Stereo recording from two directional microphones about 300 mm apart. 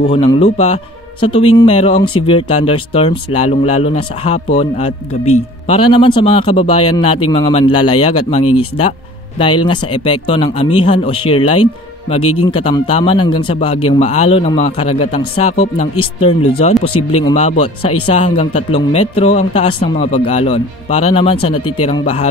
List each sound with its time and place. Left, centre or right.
0.1 s speech: centre
12.2 s speech: left
12.4 s speech: centre